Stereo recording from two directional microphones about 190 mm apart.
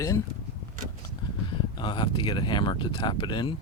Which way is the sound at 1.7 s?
25° left (ahead or behind).